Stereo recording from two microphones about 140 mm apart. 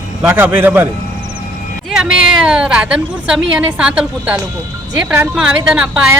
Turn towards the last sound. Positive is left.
turn(degrees=-5)  # may be behind; listen again after turning